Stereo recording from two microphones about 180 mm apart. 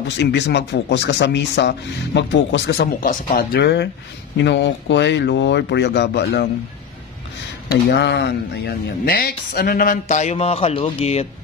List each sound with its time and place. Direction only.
0.2 s speech: 75° left (ahead or behind)
3.0 s speech: 55° left (ahead or behind); by 6.5 s 70° left (ahead or behind)
7.7 s speech: 75° left (ahead or behind); by 11.2 s 35° left (ahead or behind)